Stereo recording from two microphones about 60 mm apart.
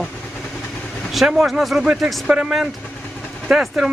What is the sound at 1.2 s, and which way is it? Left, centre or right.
Speech, centre.